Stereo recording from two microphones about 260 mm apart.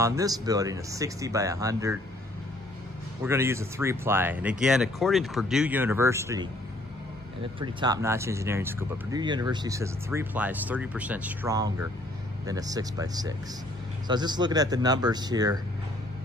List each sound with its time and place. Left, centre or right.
0.0 s speech: centre
3.3 s speech: centre
7.6 s speech: centre